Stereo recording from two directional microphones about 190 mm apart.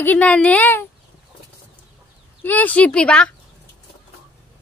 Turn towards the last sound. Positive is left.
turn(degrees=5)  # may be behind; listen again after turning